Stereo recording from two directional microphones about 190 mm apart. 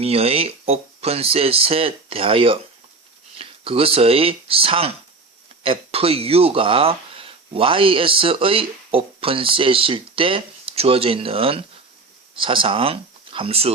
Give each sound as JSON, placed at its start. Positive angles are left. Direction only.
{"t": 0.0, "sound": "speech", "side_deg": -30}